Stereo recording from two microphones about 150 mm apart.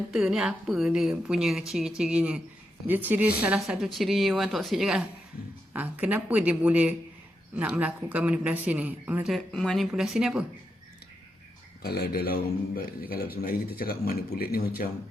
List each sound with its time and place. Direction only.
0.1 s a woman's voice: 5° right (ahead or behind)
11.8 s a man's voice: 90° left